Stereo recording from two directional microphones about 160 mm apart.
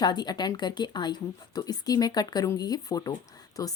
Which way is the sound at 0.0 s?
25° left (ahead or behind).